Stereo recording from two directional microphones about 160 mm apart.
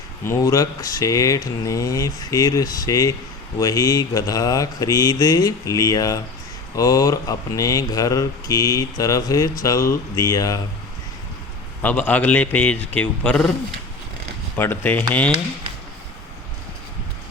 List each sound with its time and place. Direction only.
0.3 s speech: 20° left (ahead or behind)
11.8 s a man's voice: 10° left (ahead or behind)
14.5 s a man's voice: 10° left (ahead or behind)